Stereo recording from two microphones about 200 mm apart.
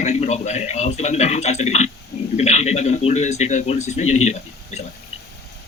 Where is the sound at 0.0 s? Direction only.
35° left (ahead or behind).